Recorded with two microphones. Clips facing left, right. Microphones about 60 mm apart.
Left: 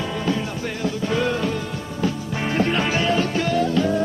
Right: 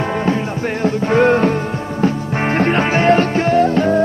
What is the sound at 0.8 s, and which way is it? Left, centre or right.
Music, right.